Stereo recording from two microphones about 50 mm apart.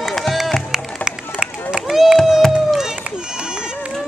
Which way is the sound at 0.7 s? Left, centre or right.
Centre.